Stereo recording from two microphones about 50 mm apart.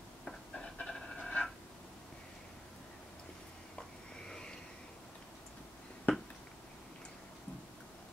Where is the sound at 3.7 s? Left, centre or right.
Centre.